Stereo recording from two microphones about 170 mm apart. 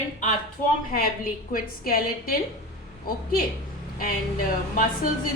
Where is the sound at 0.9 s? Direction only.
55° left (ahead or behind).